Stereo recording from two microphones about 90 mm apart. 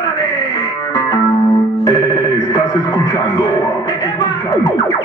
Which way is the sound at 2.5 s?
45° left (ahead or behind).